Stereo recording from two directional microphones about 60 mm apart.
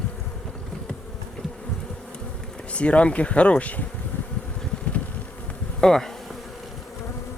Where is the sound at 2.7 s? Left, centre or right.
Centre.